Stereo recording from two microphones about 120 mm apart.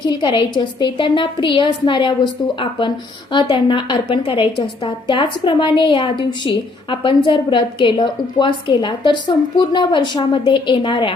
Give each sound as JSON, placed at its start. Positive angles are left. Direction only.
{"t": 0.0, "sound": "a woman's voice", "side_deg": 40}